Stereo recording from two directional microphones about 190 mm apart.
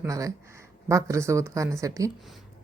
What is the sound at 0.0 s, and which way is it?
A woman's voice, 20° right (ahead or behind).